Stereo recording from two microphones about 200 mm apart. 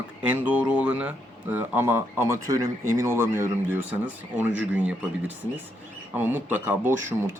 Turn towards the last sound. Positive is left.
turn(degrees=-10)  # may be behind; listen again after turning